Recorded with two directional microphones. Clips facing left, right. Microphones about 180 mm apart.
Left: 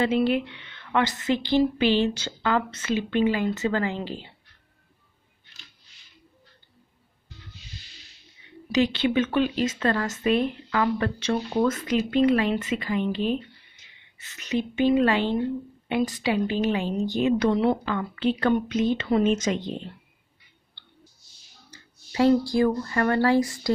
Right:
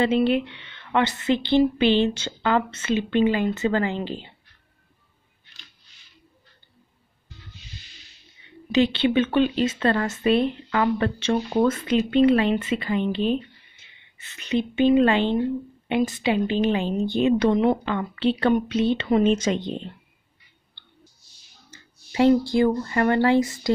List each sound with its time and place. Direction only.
0.3 s speech: 25° right (ahead or behind)
8.7 s speech: 30° right (ahead or behind)
21.6 s speech: 25° right (ahead or behind)